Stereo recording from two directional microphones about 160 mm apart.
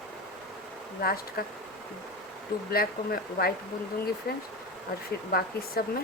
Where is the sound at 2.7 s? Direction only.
70° left (ahead or behind).